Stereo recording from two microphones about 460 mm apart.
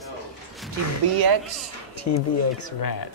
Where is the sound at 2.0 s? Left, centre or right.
Left.